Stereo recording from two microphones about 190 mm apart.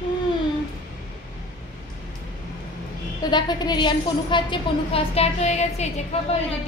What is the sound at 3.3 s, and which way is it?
A woman's voice, 20° left (ahead or behind).